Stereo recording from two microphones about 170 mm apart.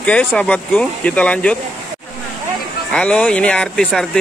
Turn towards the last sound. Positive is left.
turn(degrees=5)  # may be behind; listen again after turning